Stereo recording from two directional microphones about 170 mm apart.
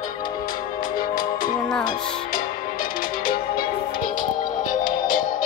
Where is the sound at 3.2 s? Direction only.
55° left (ahead or behind).